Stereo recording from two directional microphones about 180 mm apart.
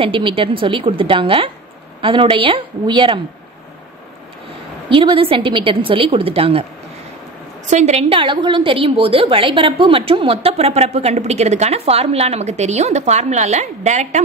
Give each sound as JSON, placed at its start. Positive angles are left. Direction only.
{"t": 0.0, "sound": "a woman's voice", "side_deg": -30}
{"t": 4.8, "sound": "a woman's voice", "side_deg": -30}
{"t": 7.6, "sound": "a woman's voice", "side_deg": -40}